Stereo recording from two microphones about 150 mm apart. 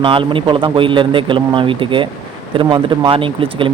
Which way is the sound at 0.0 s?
35° right (ahead or behind).